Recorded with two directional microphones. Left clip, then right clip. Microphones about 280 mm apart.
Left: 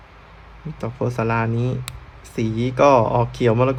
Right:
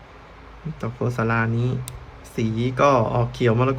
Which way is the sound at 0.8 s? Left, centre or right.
Centre.